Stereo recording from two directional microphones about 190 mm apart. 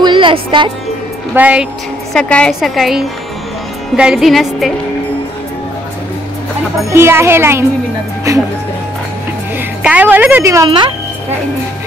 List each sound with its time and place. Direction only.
0.0 s music: 25° right (ahead or behind)
1.3 s speech: 5° right (ahead or behind)
2.1 s a woman's voice: 5° left (ahead or behind)
6.9 s speech: 15° right (ahead or behind)
9.8 s speech: 10° right (ahead or behind)